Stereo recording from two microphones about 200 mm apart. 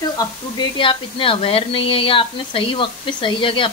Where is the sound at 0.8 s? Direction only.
25° left (ahead or behind).